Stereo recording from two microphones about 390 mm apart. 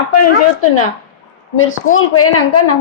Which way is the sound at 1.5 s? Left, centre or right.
Left.